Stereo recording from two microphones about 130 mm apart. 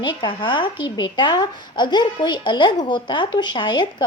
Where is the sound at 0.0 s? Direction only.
35° left (ahead or behind).